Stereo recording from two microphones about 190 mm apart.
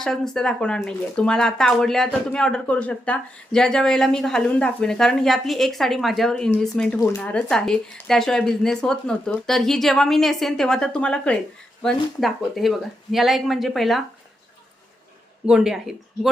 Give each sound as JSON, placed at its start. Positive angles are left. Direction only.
{"t": 0.0, "sound": "speech", "side_deg": 5}
{"t": 15.4, "sound": "speech", "side_deg": -5}